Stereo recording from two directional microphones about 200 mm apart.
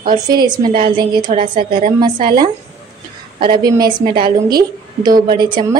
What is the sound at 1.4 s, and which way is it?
Speech, 40° right (ahead or behind).